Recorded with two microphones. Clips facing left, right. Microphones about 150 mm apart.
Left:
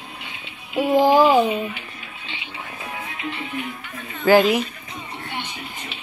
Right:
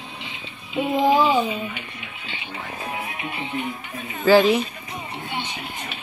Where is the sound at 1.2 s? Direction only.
55° left (ahead or behind).